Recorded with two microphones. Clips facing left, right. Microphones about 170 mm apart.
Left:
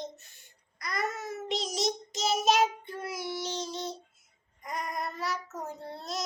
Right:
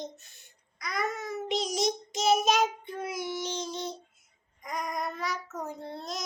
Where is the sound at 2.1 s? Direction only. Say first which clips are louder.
Right 2 dB; 50° right (ahead or behind).